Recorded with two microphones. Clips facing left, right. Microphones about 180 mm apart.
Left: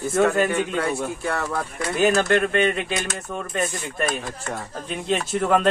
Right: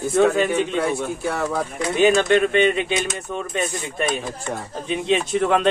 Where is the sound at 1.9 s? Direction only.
5° left (ahead or behind).